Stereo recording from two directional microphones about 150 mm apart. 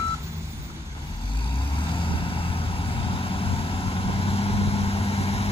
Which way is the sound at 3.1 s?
35° left (ahead or behind).